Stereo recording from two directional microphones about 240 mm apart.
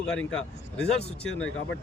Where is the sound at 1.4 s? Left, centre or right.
Left.